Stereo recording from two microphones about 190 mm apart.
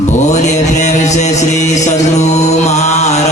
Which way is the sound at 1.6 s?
40° left (ahead or behind).